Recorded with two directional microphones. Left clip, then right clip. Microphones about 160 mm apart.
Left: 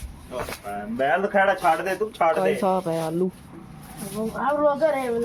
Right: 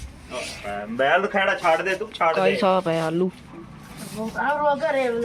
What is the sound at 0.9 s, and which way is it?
Speech, 30° left (ahead or behind).